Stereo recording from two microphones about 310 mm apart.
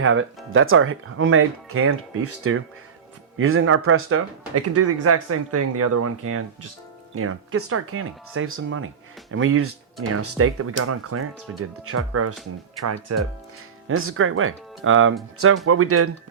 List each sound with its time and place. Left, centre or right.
0.0 s speech: right
13.8 s speech: right